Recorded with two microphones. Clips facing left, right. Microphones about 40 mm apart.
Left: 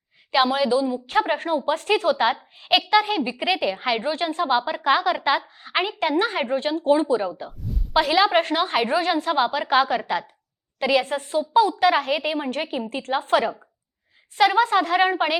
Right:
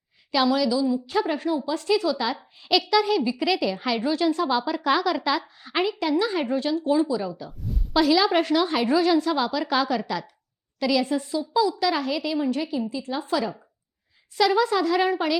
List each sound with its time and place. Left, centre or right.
0.3 s a woman's voice: left
7.6 s a sound: centre
7.9 s a woman's voice: left